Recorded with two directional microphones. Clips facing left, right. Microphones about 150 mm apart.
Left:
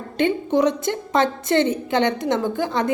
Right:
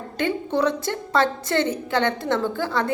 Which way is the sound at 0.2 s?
20° left (ahead or behind).